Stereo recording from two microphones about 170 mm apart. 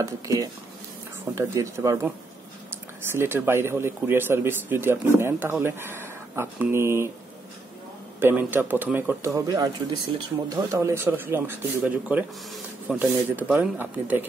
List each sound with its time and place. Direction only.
0.0 s a man's voice: 20° right (ahead or behind)
8.2 s a man's voice: 10° right (ahead or behind)